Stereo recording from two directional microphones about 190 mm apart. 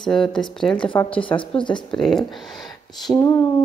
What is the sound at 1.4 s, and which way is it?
Speech, 25° left (ahead or behind).